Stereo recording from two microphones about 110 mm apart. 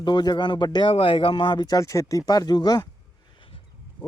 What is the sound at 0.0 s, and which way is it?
Speech, 45° left (ahead or behind).